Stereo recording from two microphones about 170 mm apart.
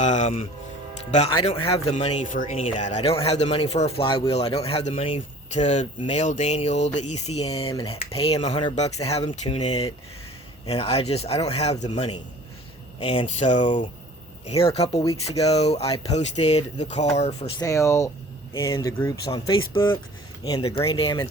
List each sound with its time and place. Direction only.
0.0 s speech: 45° left (ahead or behind)
17.6 s speech: 20° left (ahead or behind)